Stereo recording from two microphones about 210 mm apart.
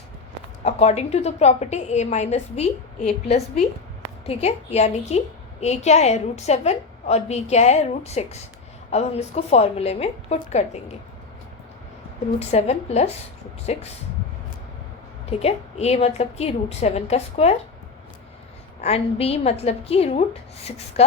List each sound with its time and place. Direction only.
0.6 s a woman's voice: 30° left (ahead or behind)
12.5 s a woman's voice: 30° left (ahead or behind)
15.3 s a woman's voice: 30° left (ahead or behind)
18.8 s a woman's voice: 30° left (ahead or behind)